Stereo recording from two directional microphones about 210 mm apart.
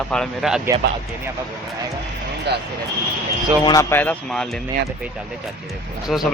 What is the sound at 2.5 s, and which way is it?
Speech, 50° right (ahead or behind).